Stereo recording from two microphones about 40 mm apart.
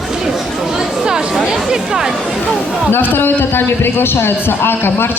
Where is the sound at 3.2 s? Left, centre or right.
Left.